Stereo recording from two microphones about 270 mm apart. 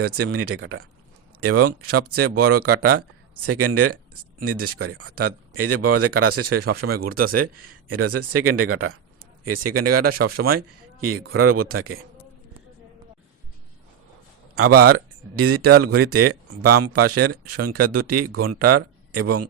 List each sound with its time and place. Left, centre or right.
0.0 s speech: right
9.6 s speech: right
11.0 s speech: right
14.5 s speech: right